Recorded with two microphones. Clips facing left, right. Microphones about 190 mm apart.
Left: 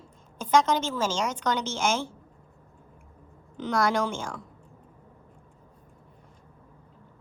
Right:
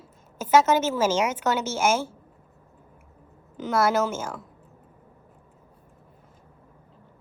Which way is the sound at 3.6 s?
5° right (ahead or behind).